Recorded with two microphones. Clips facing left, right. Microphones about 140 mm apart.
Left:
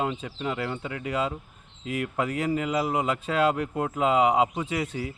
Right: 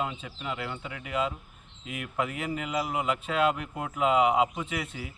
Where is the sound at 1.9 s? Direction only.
35° left (ahead or behind).